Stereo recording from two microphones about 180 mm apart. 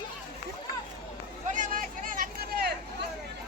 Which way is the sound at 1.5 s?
50° right (ahead or behind).